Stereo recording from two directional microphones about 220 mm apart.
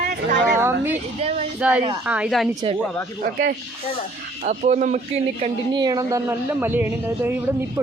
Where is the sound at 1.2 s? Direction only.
30° right (ahead or behind).